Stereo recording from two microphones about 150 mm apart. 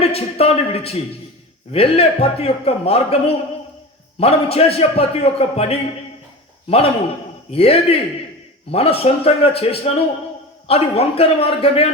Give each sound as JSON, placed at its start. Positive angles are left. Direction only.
{"t": 0.0, "sound": "a man's voice", "side_deg": 40}